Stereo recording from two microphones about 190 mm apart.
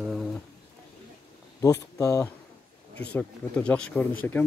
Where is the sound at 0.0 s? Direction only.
Centre (ahead or behind).